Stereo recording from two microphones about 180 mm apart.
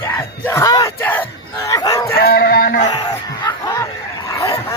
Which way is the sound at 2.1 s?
60° left (ahead or behind).